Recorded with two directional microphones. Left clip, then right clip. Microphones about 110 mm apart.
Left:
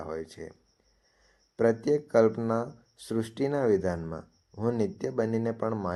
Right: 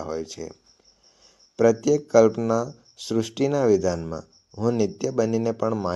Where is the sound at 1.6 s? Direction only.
25° right (ahead or behind).